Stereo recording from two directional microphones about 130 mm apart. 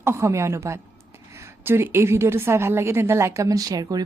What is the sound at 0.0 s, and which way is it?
A woman's voice, 20° right (ahead or behind).